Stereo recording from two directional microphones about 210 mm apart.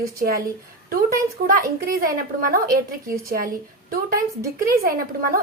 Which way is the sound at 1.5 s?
45° right (ahead or behind).